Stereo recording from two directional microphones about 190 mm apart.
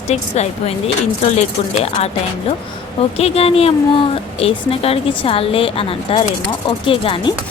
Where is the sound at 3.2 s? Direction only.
30° left (ahead or behind).